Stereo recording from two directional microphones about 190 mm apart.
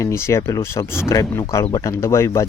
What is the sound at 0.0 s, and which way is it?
A man's voice, 15° left (ahead or behind).